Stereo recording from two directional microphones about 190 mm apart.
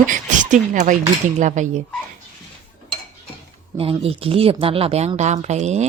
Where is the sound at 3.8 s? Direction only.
30° right (ahead or behind).